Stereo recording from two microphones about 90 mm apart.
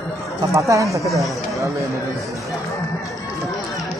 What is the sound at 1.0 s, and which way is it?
Speech, centre (ahead or behind).